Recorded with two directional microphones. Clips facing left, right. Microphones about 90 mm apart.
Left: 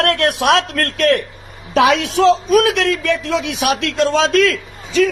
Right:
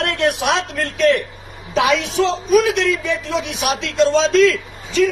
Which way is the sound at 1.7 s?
60° left (ahead or behind).